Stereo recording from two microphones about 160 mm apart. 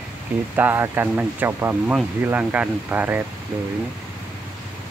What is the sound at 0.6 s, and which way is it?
Speech, 15° right (ahead or behind).